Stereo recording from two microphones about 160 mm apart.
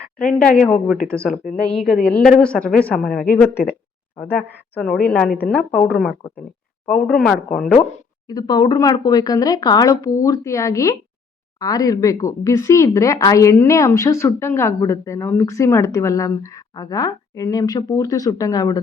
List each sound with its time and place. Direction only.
0.3 s speech: 5° left (ahead or behind)
8.3 s speech: 25° left (ahead or behind)